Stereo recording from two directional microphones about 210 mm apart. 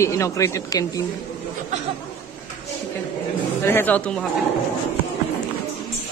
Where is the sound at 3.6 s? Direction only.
10° left (ahead or behind).